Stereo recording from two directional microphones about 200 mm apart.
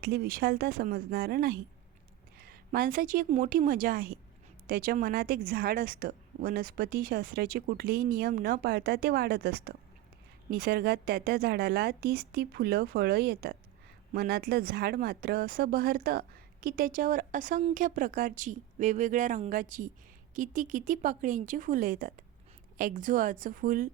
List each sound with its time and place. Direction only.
0.0 s a woman's voice: 50° right (ahead or behind)